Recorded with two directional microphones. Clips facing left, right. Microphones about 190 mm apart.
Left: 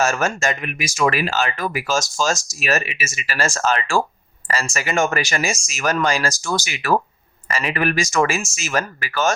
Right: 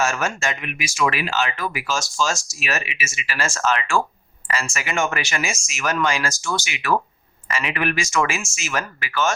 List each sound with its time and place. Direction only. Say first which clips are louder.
0.0 s speech: left 3 dB; 40° left (ahead or behind)